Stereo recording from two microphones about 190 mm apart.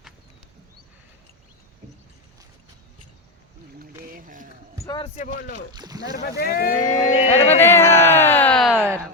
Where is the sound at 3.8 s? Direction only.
50° right (ahead or behind).